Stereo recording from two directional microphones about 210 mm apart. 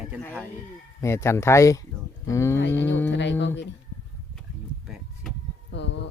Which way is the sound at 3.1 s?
60° left (ahead or behind).